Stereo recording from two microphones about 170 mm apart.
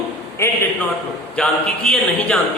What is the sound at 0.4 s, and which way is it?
Speech, 15° left (ahead or behind).